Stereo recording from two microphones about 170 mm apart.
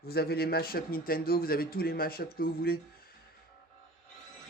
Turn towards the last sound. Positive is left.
turn(degrees=60)  # may be behind; listen again after turning